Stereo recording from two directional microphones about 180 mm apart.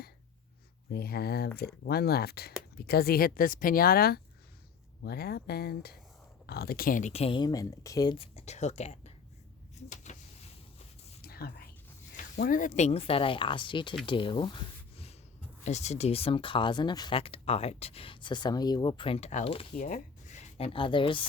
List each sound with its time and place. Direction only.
0.9 s speech: 60° left (ahead or behind); by 9.1 s 40° left (ahead or behind)
9.9 s a sound: 40° left (ahead or behind)
11.2 s whispering: 60° left (ahead or behind)
12.4 s speech: 50° left (ahead or behind); by 21.2 s 25° left (ahead or behind)